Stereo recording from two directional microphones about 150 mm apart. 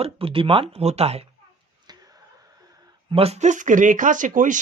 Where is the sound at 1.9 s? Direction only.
25° right (ahead or behind).